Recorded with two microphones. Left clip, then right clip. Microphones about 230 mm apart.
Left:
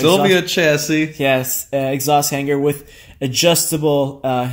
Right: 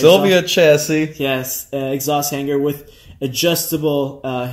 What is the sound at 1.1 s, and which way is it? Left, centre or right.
Speech, left.